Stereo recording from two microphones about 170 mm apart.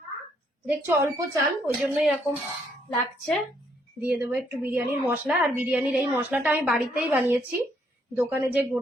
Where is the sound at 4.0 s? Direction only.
10° right (ahead or behind).